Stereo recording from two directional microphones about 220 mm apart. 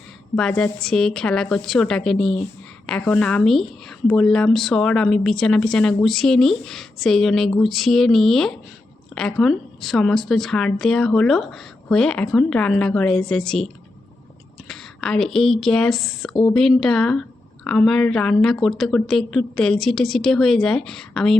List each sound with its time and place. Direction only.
0.3 s a woman's voice: 5° left (ahead or behind)
14.7 s a woman's voice: 5° left (ahead or behind)
16.3 s speech: 20° left (ahead or behind)
16.6 s a woman's voice: centre (ahead or behind)